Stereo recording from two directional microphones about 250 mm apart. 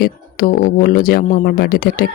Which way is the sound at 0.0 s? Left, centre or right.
Left.